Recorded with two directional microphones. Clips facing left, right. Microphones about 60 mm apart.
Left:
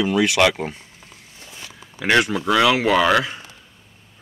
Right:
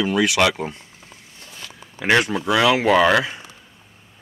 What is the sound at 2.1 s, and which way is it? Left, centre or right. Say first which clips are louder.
Speech: left 1 dB; centre.